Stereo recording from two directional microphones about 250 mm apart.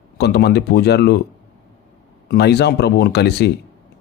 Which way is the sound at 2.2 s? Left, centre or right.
Left.